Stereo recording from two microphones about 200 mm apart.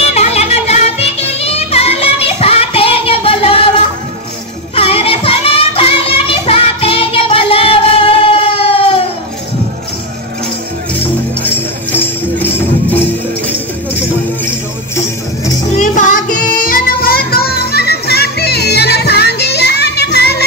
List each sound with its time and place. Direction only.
0.1 s music: 35° left (ahead or behind)
4.7 s music: 30° left (ahead or behind)
11.4 s music: 10° left (ahead or behind)
15.7 s child singing: 40° left (ahead or behind); by 20.4 s 55° left (ahead or behind)